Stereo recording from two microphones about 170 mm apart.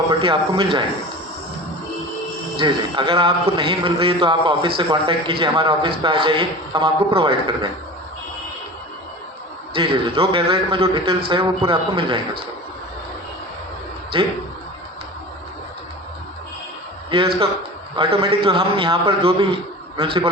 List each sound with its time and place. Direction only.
0.2 s a man's voice: 30° right (ahead or behind)
2.6 s a man's voice: 30° right (ahead or behind)
9.7 s a man's voice: 30° right (ahead or behind)
14.1 s a man's voice: 30° right (ahead or behind)
17.1 s a man's voice: 30° right (ahead or behind)